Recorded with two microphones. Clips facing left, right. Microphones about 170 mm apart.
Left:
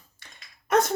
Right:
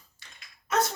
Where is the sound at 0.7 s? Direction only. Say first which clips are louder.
Left 5 dB; 55° left (ahead or behind).